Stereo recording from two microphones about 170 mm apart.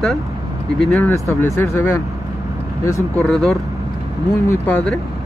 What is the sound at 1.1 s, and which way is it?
Speech, 15° left (ahead or behind).